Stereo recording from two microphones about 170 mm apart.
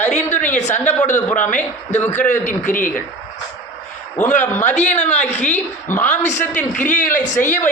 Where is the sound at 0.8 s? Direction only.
10° left (ahead or behind).